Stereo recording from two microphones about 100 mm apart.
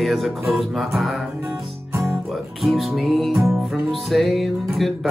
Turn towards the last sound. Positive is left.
turn(degrees=0)  # may be behind; listen again after turning